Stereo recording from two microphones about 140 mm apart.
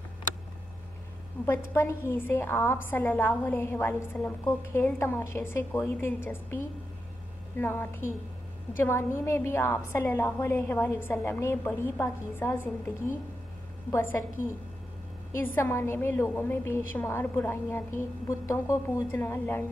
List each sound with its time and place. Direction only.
1.4 s a woman's voice: 15° left (ahead or behind)